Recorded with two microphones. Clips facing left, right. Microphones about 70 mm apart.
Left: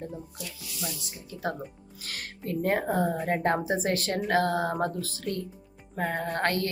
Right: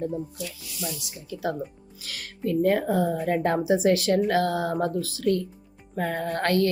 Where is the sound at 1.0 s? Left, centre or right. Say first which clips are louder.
Right 4 dB; left.